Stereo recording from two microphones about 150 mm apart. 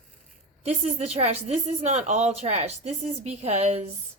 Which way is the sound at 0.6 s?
45° right (ahead or behind).